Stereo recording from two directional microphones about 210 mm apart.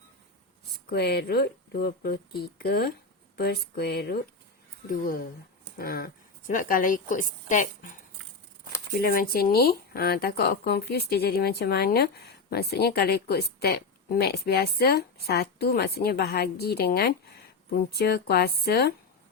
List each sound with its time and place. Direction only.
0.9 s a woman's voice: 50° left (ahead or behind)
9.0 s speech: 45° left (ahead or behind)